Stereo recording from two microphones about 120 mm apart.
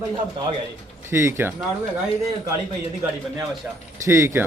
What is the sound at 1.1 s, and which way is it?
Speech, 20° right (ahead or behind).